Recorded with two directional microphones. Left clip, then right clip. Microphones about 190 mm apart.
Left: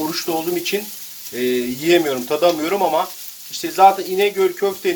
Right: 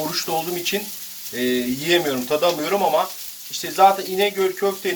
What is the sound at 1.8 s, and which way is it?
Speech, 30° left (ahead or behind).